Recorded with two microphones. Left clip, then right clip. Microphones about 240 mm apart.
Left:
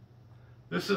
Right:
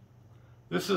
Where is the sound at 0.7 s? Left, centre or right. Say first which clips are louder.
Right 1 dB; right.